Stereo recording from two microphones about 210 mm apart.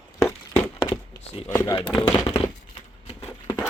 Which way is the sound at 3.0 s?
25° left (ahead or behind).